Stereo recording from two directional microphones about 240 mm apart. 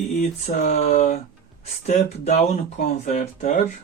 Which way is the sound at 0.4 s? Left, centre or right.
Left.